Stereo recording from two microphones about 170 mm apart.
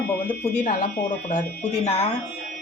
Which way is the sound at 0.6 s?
55° left (ahead or behind).